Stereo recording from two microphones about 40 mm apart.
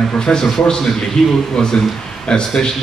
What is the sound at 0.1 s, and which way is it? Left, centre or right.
A man's voice, centre.